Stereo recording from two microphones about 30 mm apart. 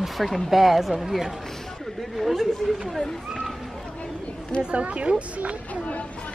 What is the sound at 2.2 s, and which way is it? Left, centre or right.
Speech, centre.